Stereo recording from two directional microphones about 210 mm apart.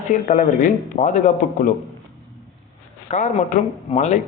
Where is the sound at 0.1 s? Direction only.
35° left (ahead or behind).